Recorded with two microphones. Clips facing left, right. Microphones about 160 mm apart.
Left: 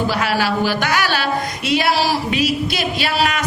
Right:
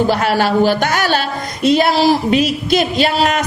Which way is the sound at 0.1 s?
50° right (ahead or behind).